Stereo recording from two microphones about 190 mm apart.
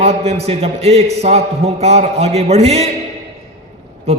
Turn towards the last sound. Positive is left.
turn(degrees=-30)  # may be behind; listen again after turning